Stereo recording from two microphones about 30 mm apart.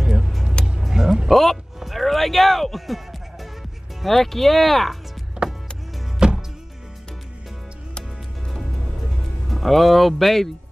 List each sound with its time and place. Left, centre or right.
0.0 s music: centre
0.7 s vehicle: centre
1.3 s speech: centre
1.8 s music: centre
4.0 s speech: centre
5.4 s music: right
9.5 s speech: centre